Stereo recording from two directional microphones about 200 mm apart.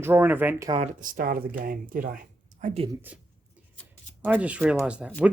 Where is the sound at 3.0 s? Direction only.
5° right (ahead or behind).